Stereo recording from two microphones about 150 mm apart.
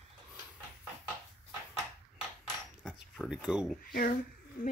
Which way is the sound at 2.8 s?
5° right (ahead or behind).